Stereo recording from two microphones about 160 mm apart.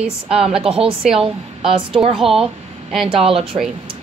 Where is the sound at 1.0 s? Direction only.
5° right (ahead or behind).